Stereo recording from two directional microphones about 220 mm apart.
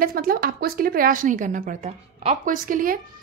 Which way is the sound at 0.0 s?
40° right (ahead or behind).